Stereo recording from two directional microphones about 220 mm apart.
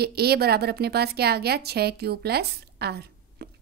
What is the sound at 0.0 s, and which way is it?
A woman's voice, 45° right (ahead or behind).